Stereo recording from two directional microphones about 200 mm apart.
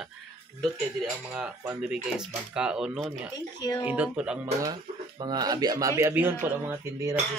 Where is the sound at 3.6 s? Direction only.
20° left (ahead or behind).